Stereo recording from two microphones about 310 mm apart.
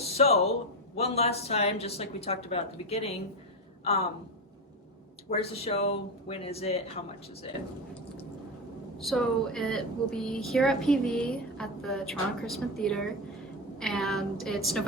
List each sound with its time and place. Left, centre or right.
0.0 s a woman's voice: centre
5.3 s a woman's voice: centre
9.0 s speech: centre